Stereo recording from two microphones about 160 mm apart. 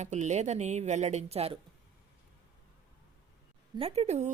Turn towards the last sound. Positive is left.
turn(degrees=-45)  # may be behind; listen again after turning